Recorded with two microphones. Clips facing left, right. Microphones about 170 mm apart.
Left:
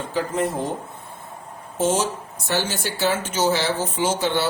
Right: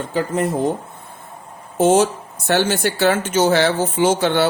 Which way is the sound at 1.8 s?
60° right (ahead or behind).